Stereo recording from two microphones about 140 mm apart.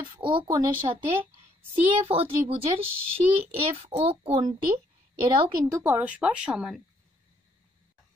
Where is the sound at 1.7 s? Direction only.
45° right (ahead or behind).